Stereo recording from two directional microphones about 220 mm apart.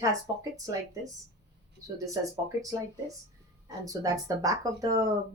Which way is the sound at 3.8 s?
15° right (ahead or behind).